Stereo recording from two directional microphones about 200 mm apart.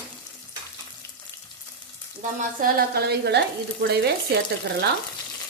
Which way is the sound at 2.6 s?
50° right (ahead or behind).